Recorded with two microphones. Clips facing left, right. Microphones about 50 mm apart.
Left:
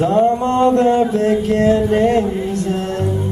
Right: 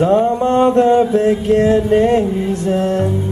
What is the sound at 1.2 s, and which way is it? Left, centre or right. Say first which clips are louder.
Mantra: right 2 dB; centre.